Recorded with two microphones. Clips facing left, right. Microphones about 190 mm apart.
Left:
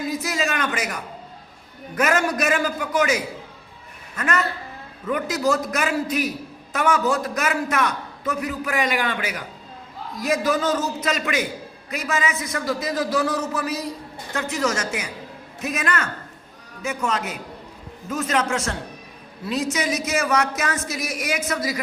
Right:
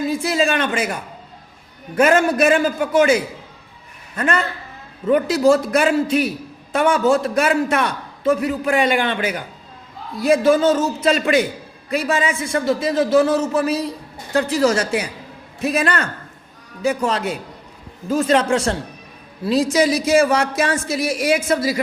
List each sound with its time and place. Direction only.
0.1 s a man's voice: 30° right (ahead or behind)
2.0 s a man's voice: 30° right (ahead or behind)